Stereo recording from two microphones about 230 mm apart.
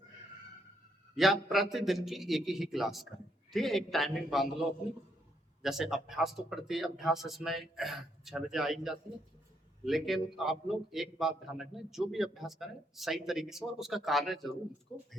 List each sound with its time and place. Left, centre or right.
1.1 s a man's voice: centre
5.6 s a man's voice: centre